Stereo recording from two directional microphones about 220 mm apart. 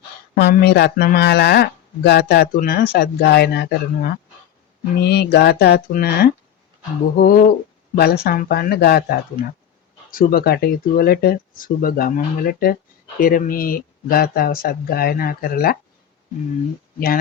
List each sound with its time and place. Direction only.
0.3 s speech: 45° left (ahead or behind)